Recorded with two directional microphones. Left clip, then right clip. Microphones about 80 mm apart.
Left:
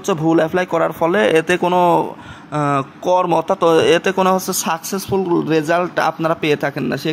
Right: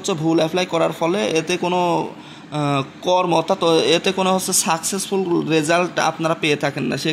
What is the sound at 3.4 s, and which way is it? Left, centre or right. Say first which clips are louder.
Speech: left 3 dB; left.